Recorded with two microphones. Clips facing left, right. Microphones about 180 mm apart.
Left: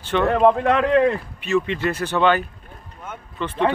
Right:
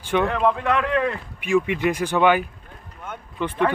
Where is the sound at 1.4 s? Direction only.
15° right (ahead or behind).